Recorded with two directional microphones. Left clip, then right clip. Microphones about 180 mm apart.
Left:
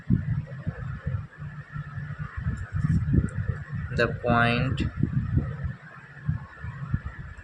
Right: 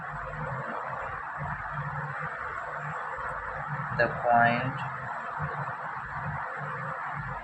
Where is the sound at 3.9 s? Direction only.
90° left.